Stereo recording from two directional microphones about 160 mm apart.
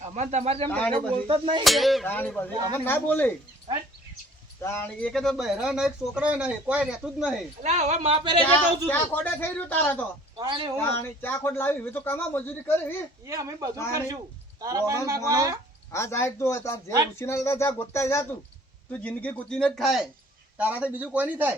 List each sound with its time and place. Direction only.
0.0 s speech: 45° right (ahead or behind)
0.7 s a man's voice: 10° left (ahead or behind)
1.3 s speech: 35° right (ahead or behind)
1.6 s speech: centre (ahead or behind)
2.0 s a man's voice: 10° left (ahead or behind)
4.6 s speech: 15° left (ahead or behind); by 7.4 s 5° right (ahead or behind)
7.6 s speech: 45° right (ahead or behind)
8.9 s a man's voice: 10° left (ahead or behind)
10.3 s speech: 30° right (ahead or behind)
10.8 s a man's voice: 15° left (ahead or behind)
13.2 s speech: 20° right (ahead or behind)
15.9 s a man's voice: 15° left (ahead or behind); by 21.5 s 10° right (ahead or behind)